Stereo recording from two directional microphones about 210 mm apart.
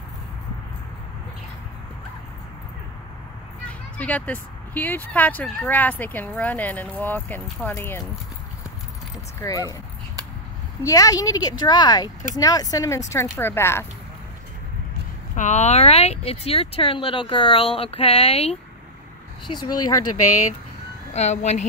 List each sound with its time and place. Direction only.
4.0 s speech: 5° left (ahead or behind)
9.4 s speech: 15° left (ahead or behind)
10.8 s speech: 15° left (ahead or behind)
15.3 s speech: 35° left (ahead or behind)
21.1 s speech: 30° left (ahead or behind)